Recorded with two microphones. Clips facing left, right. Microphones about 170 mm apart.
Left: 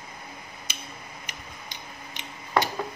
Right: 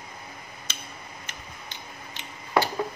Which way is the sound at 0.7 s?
10° left (ahead or behind).